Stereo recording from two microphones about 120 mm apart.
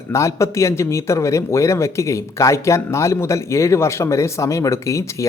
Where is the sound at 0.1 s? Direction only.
25° left (ahead or behind).